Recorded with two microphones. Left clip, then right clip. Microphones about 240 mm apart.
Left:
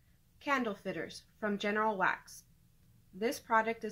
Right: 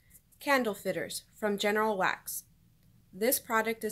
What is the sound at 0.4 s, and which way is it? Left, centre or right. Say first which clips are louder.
Speech: right 5 dB; right.